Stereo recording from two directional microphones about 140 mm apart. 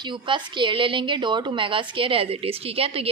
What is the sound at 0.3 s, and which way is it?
A woman's voice, 35° right (ahead or behind).